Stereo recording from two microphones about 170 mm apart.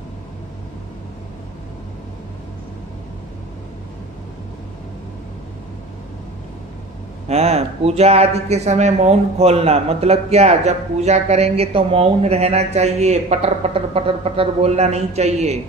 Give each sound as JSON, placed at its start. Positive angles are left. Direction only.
{"t": 7.2, "sound": "speech", "side_deg": -40}